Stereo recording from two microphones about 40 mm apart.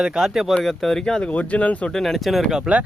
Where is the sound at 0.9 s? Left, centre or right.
Left.